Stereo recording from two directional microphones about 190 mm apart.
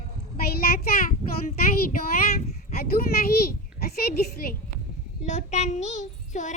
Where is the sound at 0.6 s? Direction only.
50° left (ahead or behind).